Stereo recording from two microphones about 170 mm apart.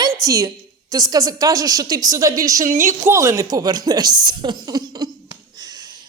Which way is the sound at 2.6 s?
50° right (ahead or behind).